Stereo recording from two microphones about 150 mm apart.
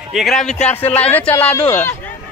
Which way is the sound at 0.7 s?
15° left (ahead or behind).